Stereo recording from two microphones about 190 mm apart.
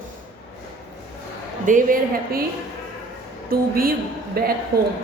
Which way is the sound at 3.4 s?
50° right (ahead or behind).